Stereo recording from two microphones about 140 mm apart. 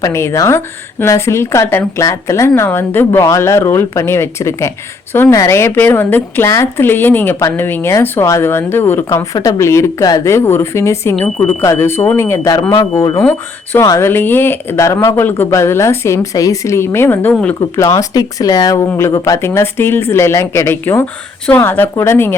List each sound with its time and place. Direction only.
0.0 s a woman's voice: 20° left (ahead or behind)
12.7 s a woman's voice: 30° left (ahead or behind)